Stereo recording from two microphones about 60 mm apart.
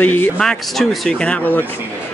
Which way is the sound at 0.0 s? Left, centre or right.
Left.